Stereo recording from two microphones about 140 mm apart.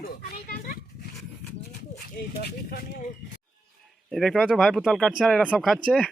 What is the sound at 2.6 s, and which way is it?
Speech, 80° left.